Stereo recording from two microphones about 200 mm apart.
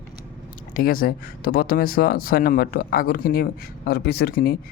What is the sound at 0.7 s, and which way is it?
Speech, 45° left (ahead or behind).